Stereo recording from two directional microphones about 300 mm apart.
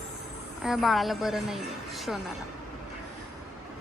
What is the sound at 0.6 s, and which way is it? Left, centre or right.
A woman's voice, centre.